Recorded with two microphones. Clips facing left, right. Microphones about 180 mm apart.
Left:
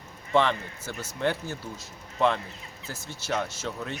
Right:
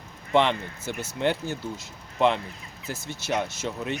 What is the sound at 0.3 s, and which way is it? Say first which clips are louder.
Speech: right 2 dB; 20° right (ahead or behind).